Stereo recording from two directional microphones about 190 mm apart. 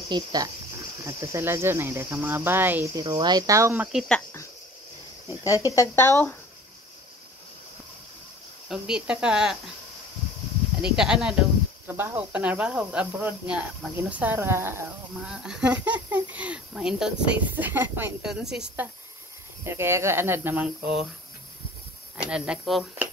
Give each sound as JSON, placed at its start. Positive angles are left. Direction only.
{"t": 0.1, "sound": "speech", "side_deg": -20}
{"t": 5.3, "sound": "speech", "side_deg": 15}
{"t": 8.6, "sound": "speech", "side_deg": -5}
{"t": 10.8, "sound": "speech", "side_deg": -5}
{"t": 22.1, "sound": "speech", "side_deg": -5}